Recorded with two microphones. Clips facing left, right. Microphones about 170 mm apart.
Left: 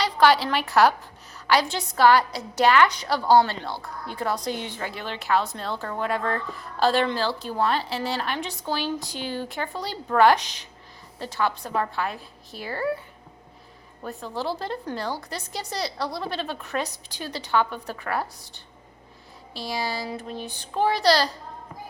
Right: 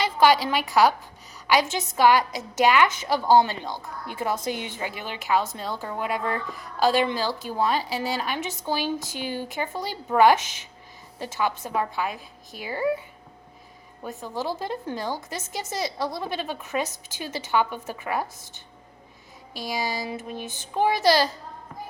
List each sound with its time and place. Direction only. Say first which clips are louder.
0.2 s a woman's voice: even; 10° right (ahead or behind)
14.0 s a woman's voice: even; 15° right (ahead or behind)
19.5 s a woman's voice: even; 15° right (ahead or behind)